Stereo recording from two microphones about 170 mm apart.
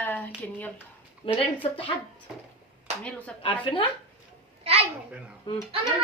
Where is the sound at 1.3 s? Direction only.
30° left (ahead or behind).